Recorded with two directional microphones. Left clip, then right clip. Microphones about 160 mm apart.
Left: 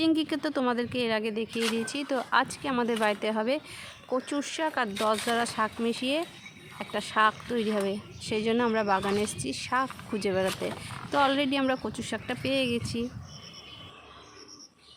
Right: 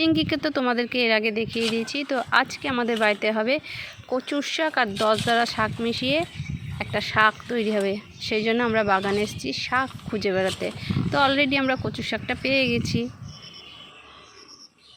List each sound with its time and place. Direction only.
0.0 s speech: 5° right (ahead or behind)